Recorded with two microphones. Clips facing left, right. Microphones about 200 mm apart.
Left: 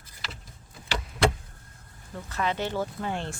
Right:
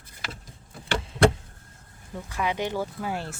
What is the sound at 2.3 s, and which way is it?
Speech, 10° right (ahead or behind).